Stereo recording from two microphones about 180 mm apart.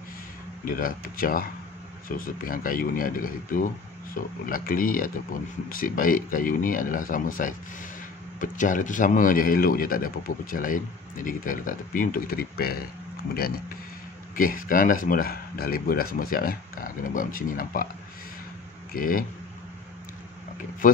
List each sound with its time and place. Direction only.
0.7 s speech: 50° left (ahead or behind)
14.3 s speech: 50° left (ahead or behind)
18.9 s speech: 50° left (ahead or behind)